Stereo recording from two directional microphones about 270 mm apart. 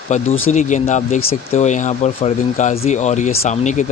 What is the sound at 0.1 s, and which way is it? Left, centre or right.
Speech, left.